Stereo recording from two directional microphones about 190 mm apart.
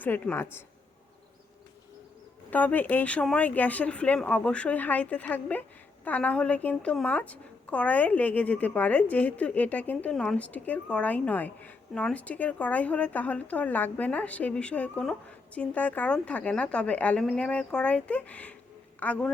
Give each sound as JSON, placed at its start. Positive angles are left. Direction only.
{"t": 0.0, "sound": "a woman's voice", "side_deg": 10}
{"t": 2.5, "sound": "a woman's voice", "side_deg": 10}